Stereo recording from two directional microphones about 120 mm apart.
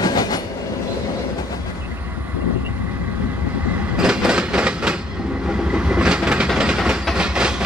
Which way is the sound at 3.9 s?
5° right (ahead or behind).